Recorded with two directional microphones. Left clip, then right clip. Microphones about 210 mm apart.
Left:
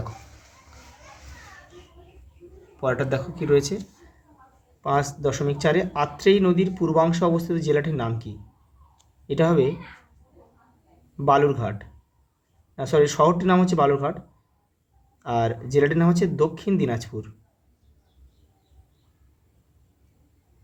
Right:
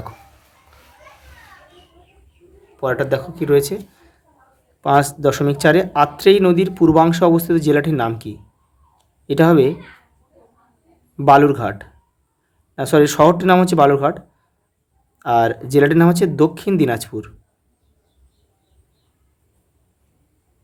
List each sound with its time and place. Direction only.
2.8 s speech: 25° right (ahead or behind)
4.8 s speech: 45° right (ahead or behind)
11.3 s speech: 40° right (ahead or behind)
15.2 s speech: 40° right (ahead or behind)